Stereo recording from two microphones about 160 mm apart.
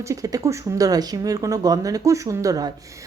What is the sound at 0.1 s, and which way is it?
A woman's voice, 20° right (ahead or behind).